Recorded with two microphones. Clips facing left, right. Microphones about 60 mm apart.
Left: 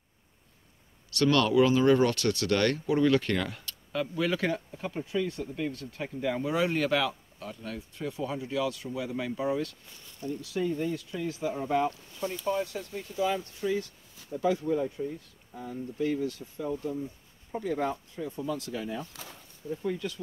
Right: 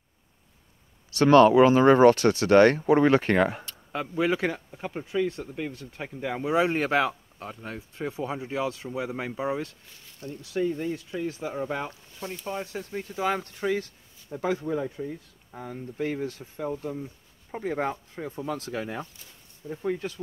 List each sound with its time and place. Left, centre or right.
1.1 s speech: right
3.9 s speech: right
12.7 s speech: right
14.3 s speech: right
15.0 s speech: right
16.0 s speech: right
19.8 s speech: right